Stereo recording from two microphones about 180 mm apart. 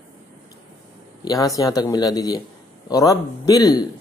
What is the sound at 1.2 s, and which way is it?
Speech, 20° left (ahead or behind).